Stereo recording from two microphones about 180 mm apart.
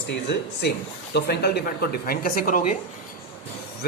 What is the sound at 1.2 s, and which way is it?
Speech, 65° left (ahead or behind).